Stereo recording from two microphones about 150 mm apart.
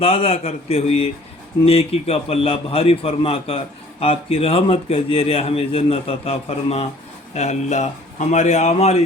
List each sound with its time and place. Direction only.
0.0 s a man's voice: 40° left (ahead or behind)